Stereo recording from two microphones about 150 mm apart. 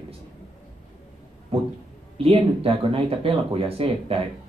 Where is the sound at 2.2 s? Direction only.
40° right (ahead or behind).